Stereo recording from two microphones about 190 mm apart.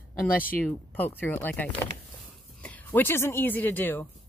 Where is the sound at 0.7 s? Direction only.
10° left (ahead or behind).